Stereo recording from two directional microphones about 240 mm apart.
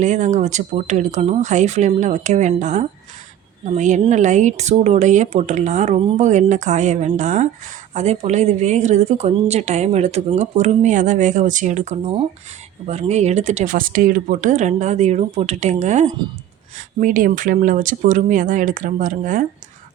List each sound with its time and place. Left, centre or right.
0.0 s a woman's voice: right